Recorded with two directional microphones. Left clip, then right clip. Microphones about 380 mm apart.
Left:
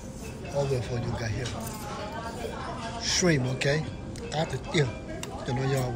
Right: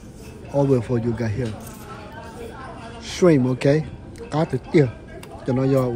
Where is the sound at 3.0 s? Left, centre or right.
Centre.